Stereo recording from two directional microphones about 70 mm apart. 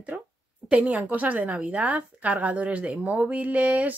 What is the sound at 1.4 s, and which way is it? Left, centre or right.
Speech, centre.